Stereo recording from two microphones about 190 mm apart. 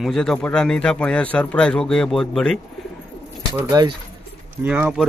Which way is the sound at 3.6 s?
20° right (ahead or behind).